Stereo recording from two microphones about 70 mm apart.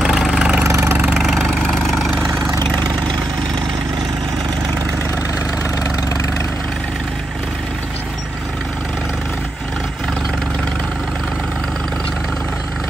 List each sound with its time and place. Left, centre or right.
0.0 s vehicle: centre
0.7 s engine: right
1.1 s engine: centre